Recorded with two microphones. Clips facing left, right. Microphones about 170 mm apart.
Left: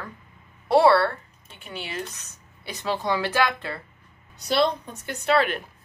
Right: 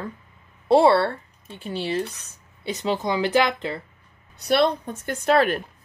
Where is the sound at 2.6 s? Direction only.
20° right (ahead or behind).